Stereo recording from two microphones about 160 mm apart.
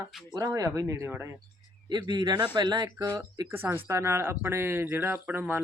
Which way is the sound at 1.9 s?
30° right (ahead or behind).